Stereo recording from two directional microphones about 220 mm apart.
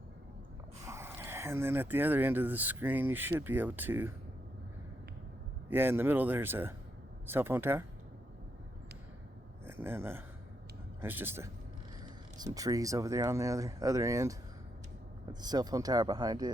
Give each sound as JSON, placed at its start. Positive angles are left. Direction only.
{"t": 0.9, "sound": "speech", "side_deg": -10}
{"t": 5.6, "sound": "speech", "side_deg": -10}
{"t": 9.6, "sound": "speech", "side_deg": -10}
{"t": 12.5, "sound": "speech", "side_deg": -15}